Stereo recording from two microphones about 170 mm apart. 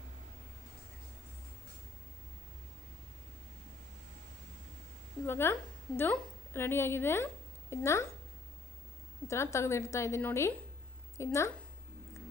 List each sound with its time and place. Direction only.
5.2 s a woman's voice: 15° left (ahead or behind)
9.2 s a woman's voice: 15° left (ahead or behind)